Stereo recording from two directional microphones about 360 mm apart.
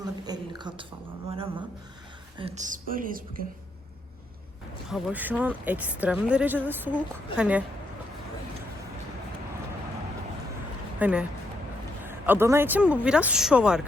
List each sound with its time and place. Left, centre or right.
0.3 s a sound: centre
2.4 s speech: right
4.9 s speech: centre
11.0 s speech: centre